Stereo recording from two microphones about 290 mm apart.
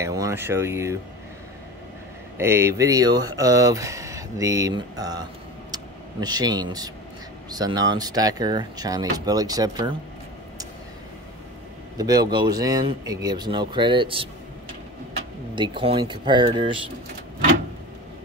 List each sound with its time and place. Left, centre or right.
0.0 s speech: centre
2.3 s speech: centre
6.2 s speech: centre
12.0 s speech: centre
15.5 s speech: centre